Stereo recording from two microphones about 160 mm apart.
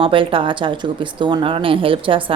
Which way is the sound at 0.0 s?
35° right (ahead or behind).